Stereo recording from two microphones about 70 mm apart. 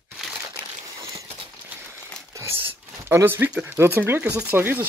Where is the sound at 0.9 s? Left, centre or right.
Right.